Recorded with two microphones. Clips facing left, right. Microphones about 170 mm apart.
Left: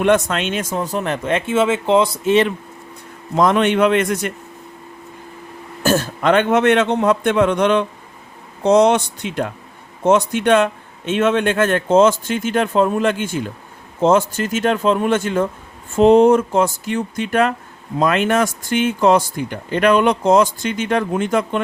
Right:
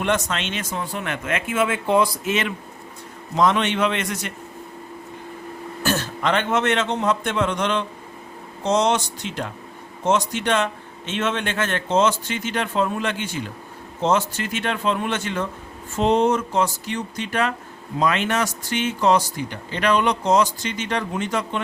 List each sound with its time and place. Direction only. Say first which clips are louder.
0.0 s speech: left 7 dB; 55° left (ahead or behind); by 2.5 s 30° left (ahead or behind)
3.3 s speech: left 5 dB; 50° left (ahead or behind)
5.8 s a man's voice: left 6 dB; 45° left (ahead or behind)